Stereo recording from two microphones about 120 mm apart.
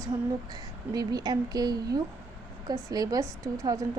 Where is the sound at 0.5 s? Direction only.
35° right (ahead or behind).